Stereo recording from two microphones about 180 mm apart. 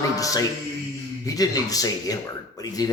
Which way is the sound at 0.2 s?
20° left (ahead or behind).